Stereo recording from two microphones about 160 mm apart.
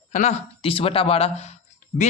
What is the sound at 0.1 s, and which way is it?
Speech, 45° left (ahead or behind).